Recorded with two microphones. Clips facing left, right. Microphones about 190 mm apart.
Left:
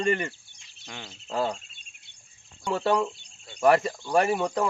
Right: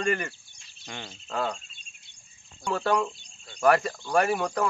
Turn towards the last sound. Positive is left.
turn(degrees=25)  # may be behind; listen again after turning